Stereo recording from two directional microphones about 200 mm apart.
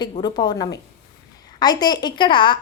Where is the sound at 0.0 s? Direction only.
20° left (ahead or behind).